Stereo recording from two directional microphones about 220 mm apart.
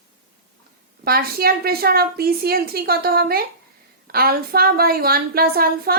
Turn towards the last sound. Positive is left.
turn(degrees=-45)  # may be behind; listen again after turning